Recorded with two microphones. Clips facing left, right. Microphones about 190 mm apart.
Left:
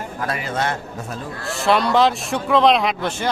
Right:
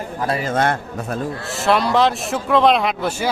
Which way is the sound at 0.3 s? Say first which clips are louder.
Right 6 dB; 35° right (ahead or behind).